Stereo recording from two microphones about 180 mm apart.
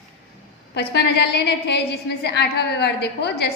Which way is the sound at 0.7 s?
65° left (ahead or behind).